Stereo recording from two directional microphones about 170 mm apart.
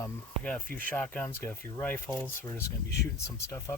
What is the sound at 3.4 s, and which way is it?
Speech, 15° left (ahead or behind).